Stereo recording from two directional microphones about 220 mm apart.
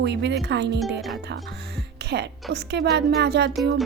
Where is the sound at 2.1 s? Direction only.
50° right (ahead or behind).